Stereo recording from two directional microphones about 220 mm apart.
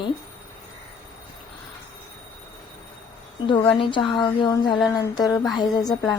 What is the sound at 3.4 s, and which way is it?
A woman's voice, 20° left (ahead or behind).